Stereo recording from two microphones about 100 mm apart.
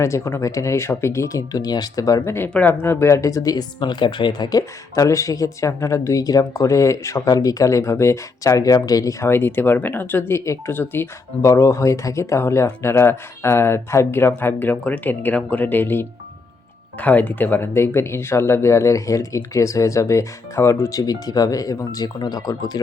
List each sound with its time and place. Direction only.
0.0 s speech: 25° left (ahead or behind)
21.0 s speech: 40° left (ahead or behind)